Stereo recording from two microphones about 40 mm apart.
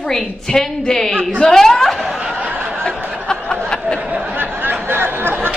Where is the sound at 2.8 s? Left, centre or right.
Left.